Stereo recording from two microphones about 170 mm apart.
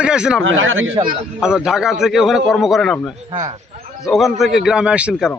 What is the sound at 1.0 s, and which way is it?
Speech, 25° right (ahead or behind).